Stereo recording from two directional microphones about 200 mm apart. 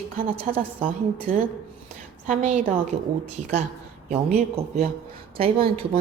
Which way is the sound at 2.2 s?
35° right (ahead or behind).